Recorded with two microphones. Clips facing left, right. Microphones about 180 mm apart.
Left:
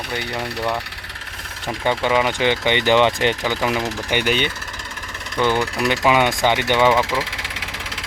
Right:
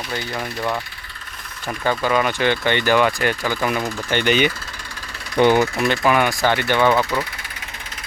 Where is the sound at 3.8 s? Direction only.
80° left.